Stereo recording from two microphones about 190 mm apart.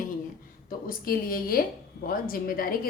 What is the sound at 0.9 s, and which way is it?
A woman's voice, 50° left (ahead or behind).